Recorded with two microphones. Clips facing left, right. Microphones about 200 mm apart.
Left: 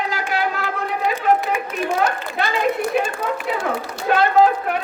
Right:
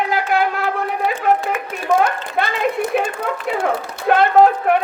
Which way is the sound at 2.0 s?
55° right (ahead or behind).